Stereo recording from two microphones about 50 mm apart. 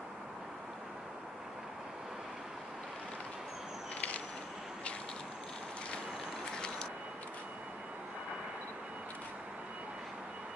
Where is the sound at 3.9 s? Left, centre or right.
Left.